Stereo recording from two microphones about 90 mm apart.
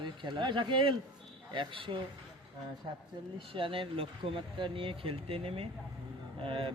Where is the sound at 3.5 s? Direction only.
80° right.